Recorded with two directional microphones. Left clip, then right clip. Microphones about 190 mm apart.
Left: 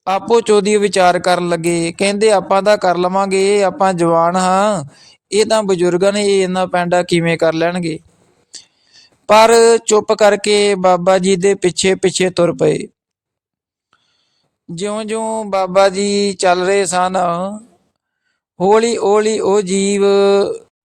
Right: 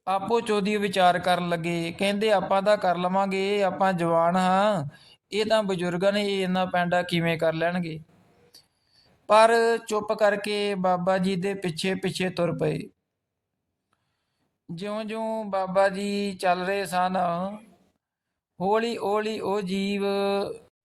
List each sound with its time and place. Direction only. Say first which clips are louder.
0.0 s speech: left 11 dB; 40° left (ahead or behind)
14.8 s speech: left 11 dB; 40° left (ahead or behind)
18.5 s speech: left 13 dB; 40° left (ahead or behind)